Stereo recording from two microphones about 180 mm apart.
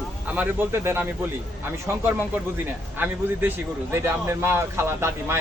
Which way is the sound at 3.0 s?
10° right (ahead or behind).